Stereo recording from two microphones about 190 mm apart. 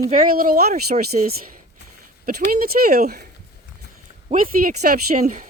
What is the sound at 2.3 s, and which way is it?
Speech, 50° right (ahead or behind).